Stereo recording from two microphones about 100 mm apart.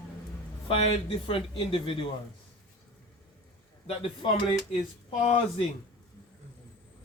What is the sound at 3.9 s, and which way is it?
Speech, 70° left (ahead or behind).